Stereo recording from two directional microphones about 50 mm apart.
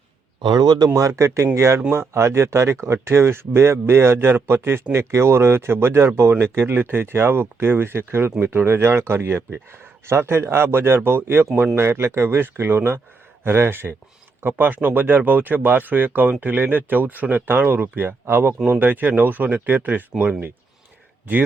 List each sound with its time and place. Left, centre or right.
0.9 s speech: right
14.6 s speech: right
18.6 s speech: right